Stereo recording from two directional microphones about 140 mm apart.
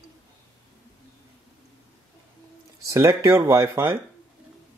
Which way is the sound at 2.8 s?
20° right (ahead or behind).